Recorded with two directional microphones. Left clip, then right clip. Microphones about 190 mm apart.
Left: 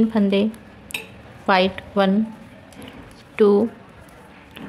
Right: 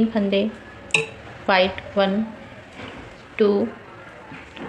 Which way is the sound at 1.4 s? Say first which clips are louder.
Even; 40° left (ahead or behind).